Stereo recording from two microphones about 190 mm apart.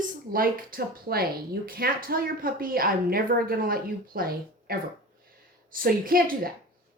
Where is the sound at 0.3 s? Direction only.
50° right (ahead or behind).